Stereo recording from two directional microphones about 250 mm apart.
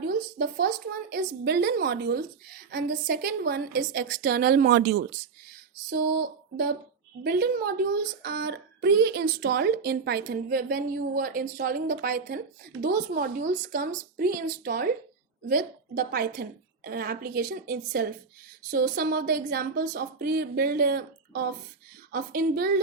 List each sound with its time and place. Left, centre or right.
0.3 s a woman's voice: right